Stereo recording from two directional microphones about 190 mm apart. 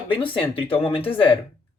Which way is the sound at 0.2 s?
30° left (ahead or behind).